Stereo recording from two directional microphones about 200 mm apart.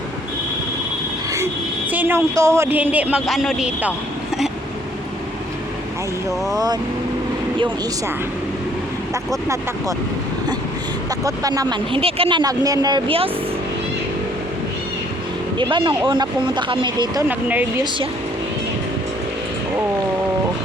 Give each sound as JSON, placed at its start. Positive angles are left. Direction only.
{"t": 1.9, "sound": "speech", "side_deg": -10}
{"t": 6.5, "sound": "speech", "side_deg": -20}
{"t": 9.3, "sound": "speech", "side_deg": -15}
{"t": 11.2, "sound": "speech", "side_deg": -15}
{"t": 15.5, "sound": "speech", "side_deg": -25}
{"t": 17.2, "sound": "speech", "side_deg": -10}